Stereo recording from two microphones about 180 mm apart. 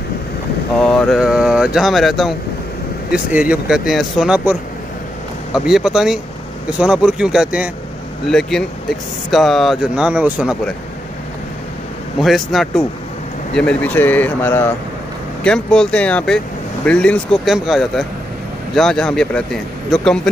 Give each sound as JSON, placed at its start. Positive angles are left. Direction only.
{"t": 0.7, "sound": "speech", "side_deg": 5}
{"t": 12.2, "sound": "speech", "side_deg": 0}